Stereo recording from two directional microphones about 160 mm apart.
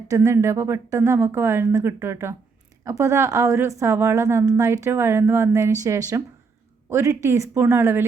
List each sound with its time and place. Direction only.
0.1 s a woman's voice: 20° right (ahead or behind)